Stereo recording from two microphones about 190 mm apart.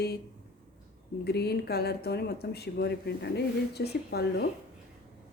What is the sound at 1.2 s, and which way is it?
Speech, 60° left (ahead or behind).